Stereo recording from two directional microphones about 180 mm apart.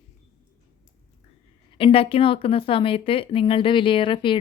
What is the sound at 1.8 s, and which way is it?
Speech, 30° left (ahead or behind).